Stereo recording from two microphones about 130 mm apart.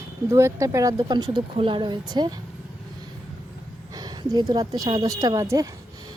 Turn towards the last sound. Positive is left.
turn(degrees=-25)  # may be behind; listen again after turning